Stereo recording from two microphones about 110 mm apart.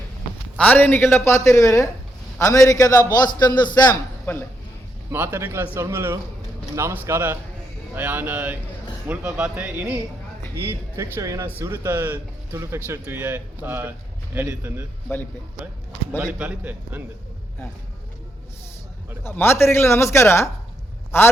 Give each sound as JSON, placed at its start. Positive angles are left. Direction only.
{"t": 0.5, "sound": "a man's voice", "side_deg": 15}
{"t": 5.1, "sound": "speech", "side_deg": -20}
{"t": 10.7, "sound": "speech", "side_deg": -25}
{"t": 16.1, "sound": "speech", "side_deg": -10}
{"t": 19.2, "sound": "speech", "side_deg": 20}